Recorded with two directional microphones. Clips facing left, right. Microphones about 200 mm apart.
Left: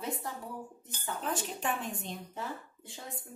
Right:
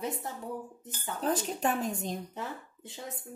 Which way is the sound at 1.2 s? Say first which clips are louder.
Right 7 dB; 40° right (ahead or behind).